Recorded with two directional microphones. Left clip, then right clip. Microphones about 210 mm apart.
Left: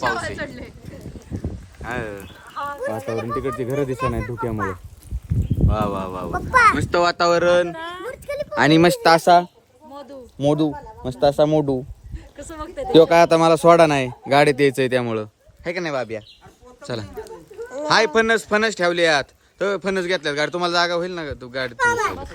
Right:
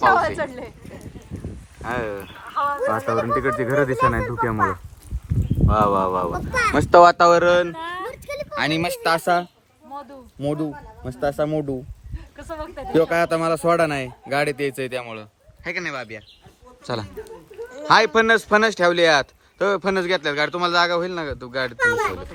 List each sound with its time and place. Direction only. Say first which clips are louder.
0.0 s a woman's voice: right 6 dB; 15° right (ahead or behind)
1.8 s speech: right 2 dB; 5° left (ahead or behind)
5.3 s a sound: even; centre (ahead or behind)
5.6 s speech: right 6 dB; 5° left (ahead or behind)
9.0 s speech: left 4 dB; 50° left (ahead or behind)
12.9 s speech: left 6 dB; 45° left (ahead or behind)
15.6 s speech: left 3 dB; 20° left (ahead or behind)
16.8 s speech: right 2 dB; 5° left (ahead or behind)
17.2 s a sound: left 1 dB; 35° left (ahead or behind)
17.8 s speech: right 1 dB; 10° left (ahead or behind)